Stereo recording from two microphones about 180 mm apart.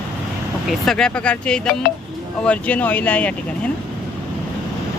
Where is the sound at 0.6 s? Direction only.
Centre (ahead or behind).